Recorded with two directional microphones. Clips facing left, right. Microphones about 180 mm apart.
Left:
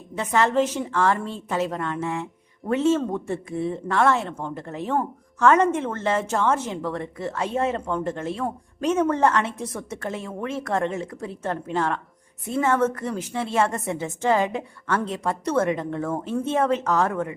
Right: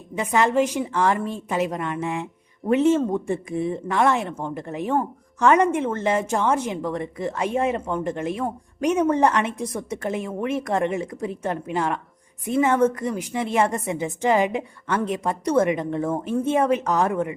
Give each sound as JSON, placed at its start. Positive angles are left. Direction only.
{"t": 0.2, "sound": "a woman's voice", "side_deg": -15}